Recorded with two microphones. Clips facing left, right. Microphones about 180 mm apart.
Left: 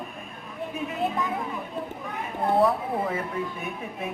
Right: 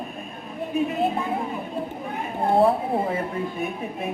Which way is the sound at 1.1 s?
30° right (ahead or behind).